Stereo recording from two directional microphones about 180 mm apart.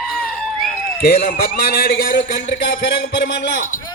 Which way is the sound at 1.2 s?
55° left (ahead or behind).